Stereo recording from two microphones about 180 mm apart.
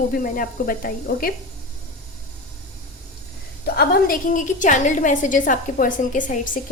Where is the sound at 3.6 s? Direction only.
60° left (ahead or behind).